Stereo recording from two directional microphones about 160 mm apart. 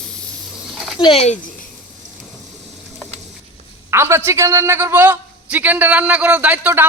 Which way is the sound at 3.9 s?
15° right (ahead or behind).